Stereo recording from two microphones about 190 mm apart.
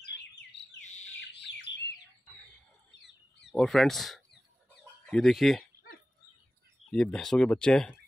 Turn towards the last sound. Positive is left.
turn(degrees=5)  # may be behind; listen again after turning